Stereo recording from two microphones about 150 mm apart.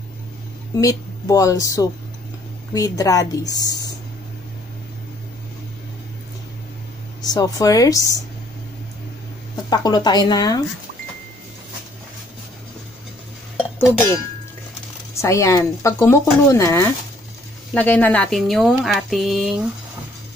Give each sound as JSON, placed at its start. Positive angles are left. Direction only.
{"t": 0.7, "sound": "speech", "side_deg": 20}
{"t": 7.2, "sound": "speech", "side_deg": 25}
{"t": 9.7, "sound": "speech", "side_deg": 25}
{"t": 13.7, "sound": "speech", "side_deg": 15}
{"t": 15.2, "sound": "speech", "side_deg": 20}